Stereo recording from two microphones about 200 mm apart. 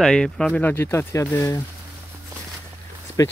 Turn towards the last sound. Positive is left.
turn(degrees=15)  # may be behind; listen again after turning